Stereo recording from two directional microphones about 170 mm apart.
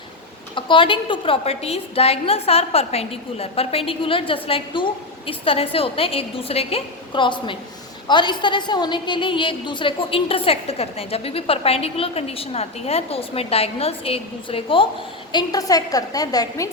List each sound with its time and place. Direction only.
0.5 s a woman's voice: 30° left (ahead or behind)